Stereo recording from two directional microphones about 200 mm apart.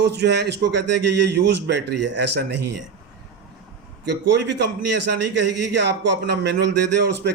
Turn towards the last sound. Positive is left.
turn(degrees=-60)  # may be behind; listen again after turning